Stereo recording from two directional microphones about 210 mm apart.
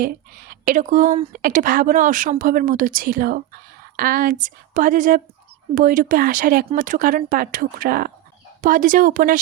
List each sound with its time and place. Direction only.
0.0 s speech: 45° right (ahead or behind)